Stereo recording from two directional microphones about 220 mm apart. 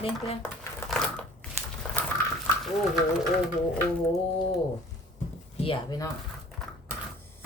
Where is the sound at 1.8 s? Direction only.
5° left (ahead or behind).